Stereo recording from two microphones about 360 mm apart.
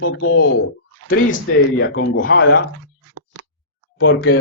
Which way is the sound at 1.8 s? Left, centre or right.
Left.